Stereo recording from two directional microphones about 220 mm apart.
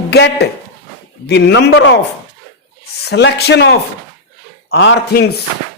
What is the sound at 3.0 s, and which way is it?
A woman's voice, 50° left (ahead or behind).